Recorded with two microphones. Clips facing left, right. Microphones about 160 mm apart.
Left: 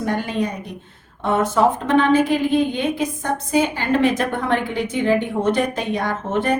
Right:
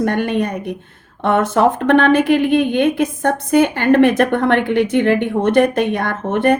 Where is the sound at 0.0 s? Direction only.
65° right (ahead or behind).